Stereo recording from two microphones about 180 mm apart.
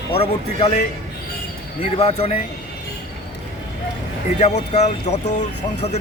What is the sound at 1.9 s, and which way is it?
Speech, 35° left (ahead or behind).